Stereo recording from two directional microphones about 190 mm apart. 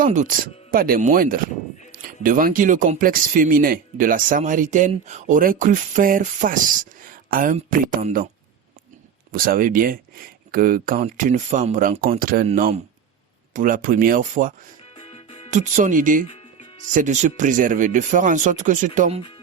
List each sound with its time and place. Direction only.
0.0 s speech: 40° right (ahead or behind)
9.3 s speech: 50° right (ahead or behind)
14.9 s music: 30° left (ahead or behind)
15.4 s speech: 40° right (ahead or behind)